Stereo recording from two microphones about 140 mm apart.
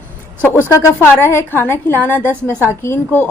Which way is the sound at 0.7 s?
20° left (ahead or behind).